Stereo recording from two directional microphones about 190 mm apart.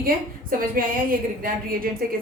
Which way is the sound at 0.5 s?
50° right (ahead or behind).